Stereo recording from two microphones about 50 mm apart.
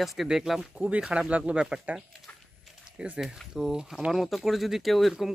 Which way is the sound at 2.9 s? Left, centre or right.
Right.